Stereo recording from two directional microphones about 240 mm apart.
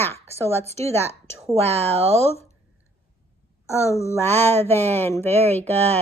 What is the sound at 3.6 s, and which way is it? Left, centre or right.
Speech, centre.